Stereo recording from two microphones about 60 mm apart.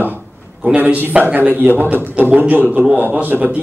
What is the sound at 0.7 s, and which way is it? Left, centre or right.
A man's voice, right.